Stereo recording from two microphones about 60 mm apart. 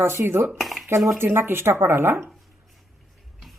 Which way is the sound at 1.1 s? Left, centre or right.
Right.